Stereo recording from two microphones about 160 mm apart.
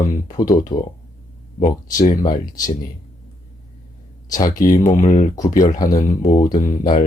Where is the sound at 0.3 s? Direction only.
55° left (ahead or behind).